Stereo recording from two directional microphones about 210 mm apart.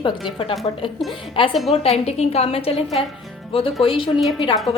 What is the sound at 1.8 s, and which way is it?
A woman's voice, 30° left (ahead or behind).